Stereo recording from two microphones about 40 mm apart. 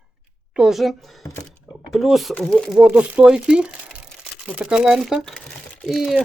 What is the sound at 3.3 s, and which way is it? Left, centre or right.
Speech, right.